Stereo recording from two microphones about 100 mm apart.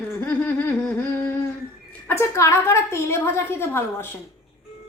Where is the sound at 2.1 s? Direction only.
25° left (ahead or behind).